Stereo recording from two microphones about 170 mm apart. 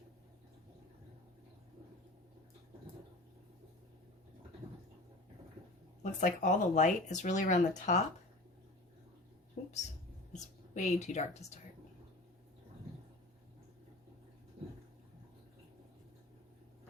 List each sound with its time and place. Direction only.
6.0 s speech: 45° left (ahead or behind)
10.3 s speech: 45° left (ahead or behind)